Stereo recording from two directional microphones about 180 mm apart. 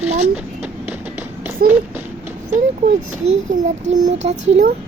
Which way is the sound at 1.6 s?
55° right (ahead or behind).